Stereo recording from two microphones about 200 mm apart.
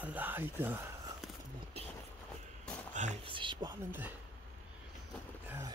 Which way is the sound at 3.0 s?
30° right (ahead or behind).